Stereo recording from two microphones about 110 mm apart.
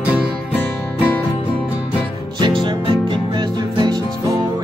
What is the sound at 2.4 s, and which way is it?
Music, 45° right (ahead or behind).